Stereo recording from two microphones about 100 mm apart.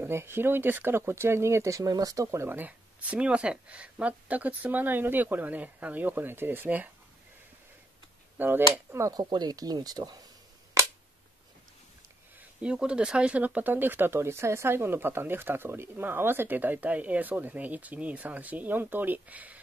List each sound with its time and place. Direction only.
0.0 s speech: 25° right (ahead or behind)
2.2 s speech: 25° right (ahead or behind)
8.4 s speech: 20° right (ahead or behind)
9.2 s speech: 45° right (ahead or behind)
12.6 s speech: 10° right (ahead or behind)